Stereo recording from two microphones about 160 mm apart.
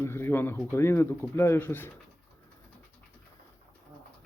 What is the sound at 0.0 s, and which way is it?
Speech, 15° left (ahead or behind).